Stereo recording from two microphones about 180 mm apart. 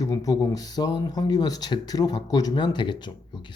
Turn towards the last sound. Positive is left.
turn(degrees=25)  # may be behind; listen again after turning